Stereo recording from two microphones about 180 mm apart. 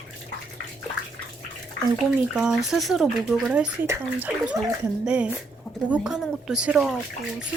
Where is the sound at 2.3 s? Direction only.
Centre (ahead or behind).